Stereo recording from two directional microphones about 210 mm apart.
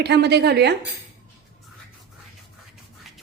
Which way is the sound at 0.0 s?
55° right (ahead or behind).